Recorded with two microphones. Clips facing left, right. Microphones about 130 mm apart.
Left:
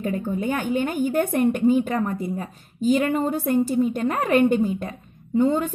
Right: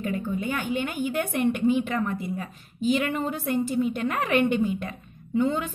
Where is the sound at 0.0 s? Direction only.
45° left (ahead or behind).